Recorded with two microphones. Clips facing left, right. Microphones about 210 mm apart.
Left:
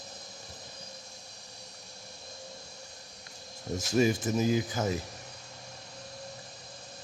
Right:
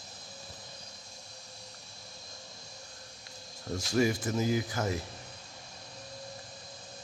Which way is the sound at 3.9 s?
20° left (ahead or behind).